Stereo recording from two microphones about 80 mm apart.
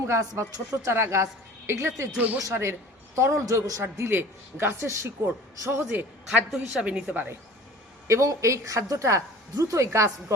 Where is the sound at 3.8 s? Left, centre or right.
Right.